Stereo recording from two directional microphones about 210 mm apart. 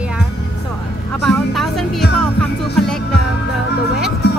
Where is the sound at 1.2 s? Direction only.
Centre (ahead or behind).